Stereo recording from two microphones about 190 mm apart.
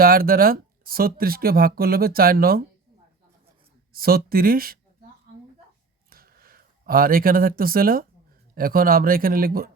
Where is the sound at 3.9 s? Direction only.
50° right (ahead or behind).